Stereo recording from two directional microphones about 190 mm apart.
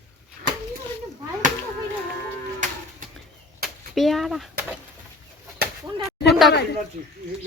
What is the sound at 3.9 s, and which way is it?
Speech, centre (ahead or behind).